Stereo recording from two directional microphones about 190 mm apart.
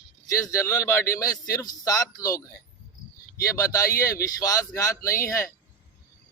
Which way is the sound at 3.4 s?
15° left (ahead or behind).